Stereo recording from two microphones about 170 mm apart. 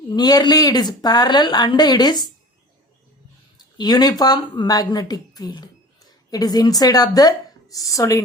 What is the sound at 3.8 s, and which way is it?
Speech, 25° left (ahead or behind).